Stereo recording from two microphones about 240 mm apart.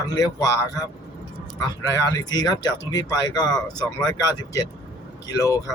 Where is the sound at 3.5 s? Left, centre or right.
Centre.